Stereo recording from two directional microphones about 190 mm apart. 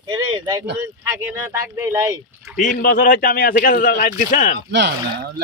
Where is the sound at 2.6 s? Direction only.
45° left (ahead or behind).